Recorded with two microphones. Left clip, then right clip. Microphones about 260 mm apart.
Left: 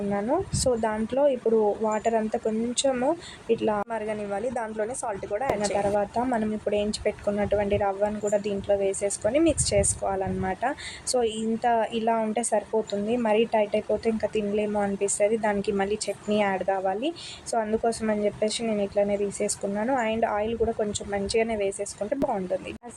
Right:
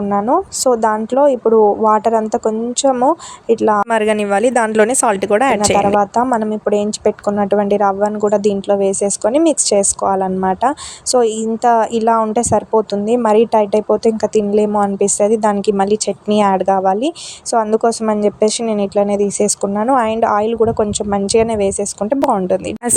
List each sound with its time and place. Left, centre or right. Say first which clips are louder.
0.1 s a woman's voice: right 13 dB; centre
3.8 s speech: right 16 dB; right
6.0 s a woman's voice: right 12 dB; right